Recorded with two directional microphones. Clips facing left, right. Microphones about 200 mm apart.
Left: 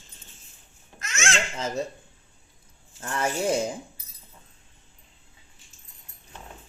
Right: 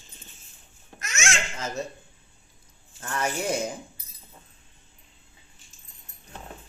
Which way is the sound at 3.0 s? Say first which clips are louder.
Left 2 dB; 25° left (ahead or behind).